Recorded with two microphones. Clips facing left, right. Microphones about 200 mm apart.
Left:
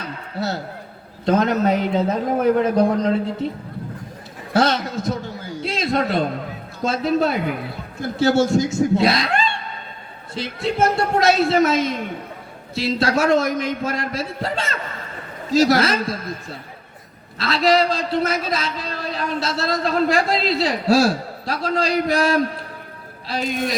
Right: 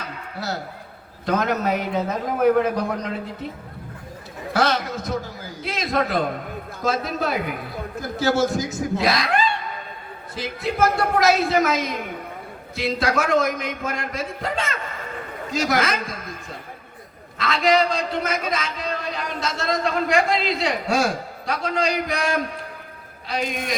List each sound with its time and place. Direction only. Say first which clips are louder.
0.3 s a man's voice: left 4 dB; 30° left (ahead or behind)
4.5 s a sound: left 3 dB; 30° left (ahead or behind)
6.8 s a man's voice: left 5 dB; 30° left (ahead or behind)